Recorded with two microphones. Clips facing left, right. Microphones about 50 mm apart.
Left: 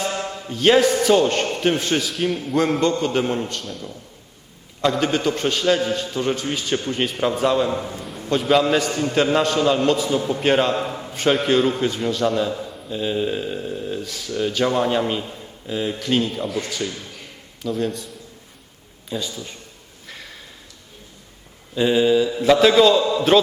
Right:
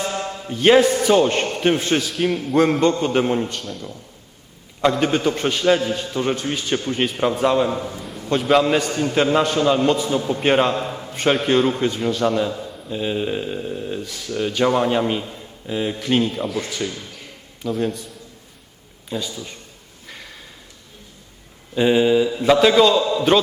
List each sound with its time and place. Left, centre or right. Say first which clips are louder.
0.4 s a man's voice: right 2 dB; centre
2.0 s a man's voice: right 2 dB; centre
2.8 s a man's voice: right 2 dB; centre
4.8 s a man's voice: right 2 dB; centre
10.4 s a man's voice: right 1 dB; centre
10.8 s a man's voice: even; centre
12.9 s a man's voice: even; centre
16.3 s a man's voice: right 1 dB; centre
16.6 s a man's voice: right 1 dB; centre
17.7 s a man's voice: right 1 dB; centre
20.1 s a sound: even; centre
21.8 s a man's voice: right 1 dB; centre
22.3 s a man's voice: even; centre